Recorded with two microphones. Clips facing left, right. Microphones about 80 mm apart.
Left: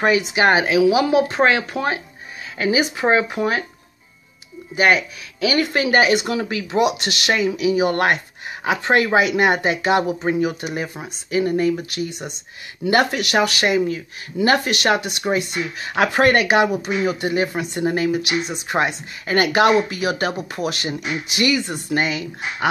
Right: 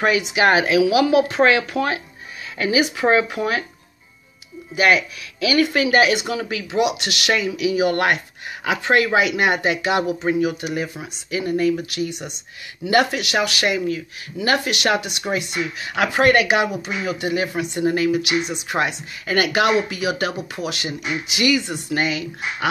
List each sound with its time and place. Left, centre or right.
0.0 s speech: left
4.7 s speech: left